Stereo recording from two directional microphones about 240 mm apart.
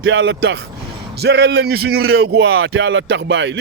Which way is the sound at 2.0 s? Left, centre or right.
Right.